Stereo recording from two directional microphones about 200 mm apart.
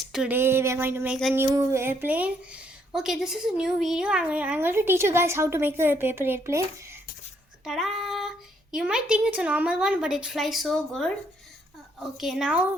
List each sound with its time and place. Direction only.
0.0 s a woman's voice: centre (ahead or behind)
7.6 s female singing: centre (ahead or behind)
8.7 s a woman's voice: 5° right (ahead or behind)
12.1 s a woman's voice: centre (ahead or behind)